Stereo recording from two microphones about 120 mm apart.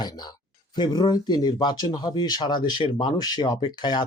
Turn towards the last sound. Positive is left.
turn(degrees=40)  # may be behind; listen again after turning